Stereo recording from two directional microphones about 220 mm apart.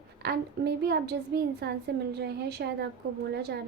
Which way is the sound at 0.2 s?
45° right (ahead or behind).